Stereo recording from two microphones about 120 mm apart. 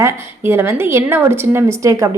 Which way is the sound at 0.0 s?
20° right (ahead or behind).